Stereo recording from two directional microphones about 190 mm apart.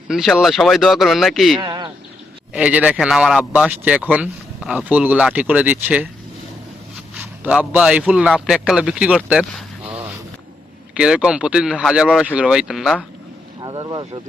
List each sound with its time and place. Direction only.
0.1 s speech: centre (ahead or behind)
1.5 s speech: 25° right (ahead or behind)
2.5 s speech: 5° right (ahead or behind)
7.2 s a man's voice: 10° right (ahead or behind)
13.6 s speech: 25° right (ahead or behind)